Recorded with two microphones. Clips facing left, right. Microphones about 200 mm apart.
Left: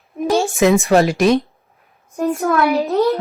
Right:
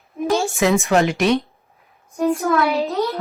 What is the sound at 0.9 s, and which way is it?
Speech, 35° left (ahead or behind).